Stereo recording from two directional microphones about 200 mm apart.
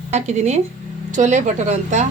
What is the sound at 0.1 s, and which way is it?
Speech, 35° right (ahead or behind).